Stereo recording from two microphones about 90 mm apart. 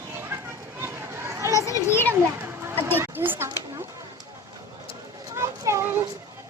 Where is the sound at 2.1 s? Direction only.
25° right (ahead or behind).